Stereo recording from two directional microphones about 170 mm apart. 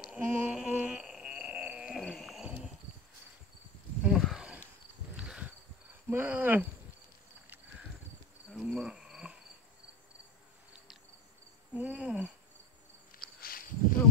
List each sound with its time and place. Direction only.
0.1 s a sound: 5° right (ahead or behind)
4.0 s a sound: centre (ahead or behind)
5.1 s insect: 5° right (ahead or behind)
6.0 s cricket: 10° right (ahead or behind)
8.5 s cricket: centre (ahead or behind)
11.7 s cricket: 10° right (ahead or behind)
13.1 s walk: 60° left (ahead or behind)